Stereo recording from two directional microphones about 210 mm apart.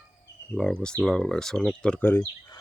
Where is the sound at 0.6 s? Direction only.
5° left (ahead or behind).